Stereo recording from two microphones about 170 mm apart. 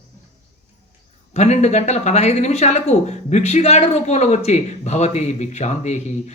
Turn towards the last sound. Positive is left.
turn(degrees=40)  # may be behind; listen again after turning